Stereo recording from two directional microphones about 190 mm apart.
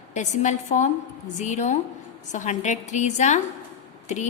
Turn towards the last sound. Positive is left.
turn(degrees=40)  # may be behind; listen again after turning